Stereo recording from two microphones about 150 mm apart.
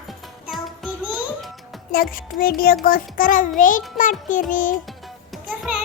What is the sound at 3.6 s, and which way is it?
Music, 60° left (ahead or behind).